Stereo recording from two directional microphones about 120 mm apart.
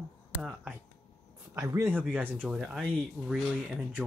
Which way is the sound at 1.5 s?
35° right (ahead or behind).